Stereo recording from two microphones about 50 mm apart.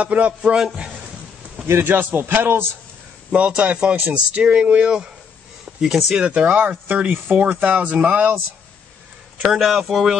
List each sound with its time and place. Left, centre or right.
0.0 s speech: right
0.4 s speech: centre
1.7 s a man's voice: right
3.3 s speech: right
5.8 s a man's voice: centre
6.1 s speech: right
6.4 s speech: right
9.4 s a man's voice: centre